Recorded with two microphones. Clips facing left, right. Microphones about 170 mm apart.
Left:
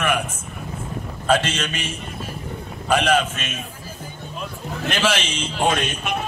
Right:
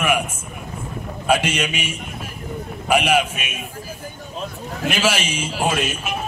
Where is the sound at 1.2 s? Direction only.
10° right (ahead or behind).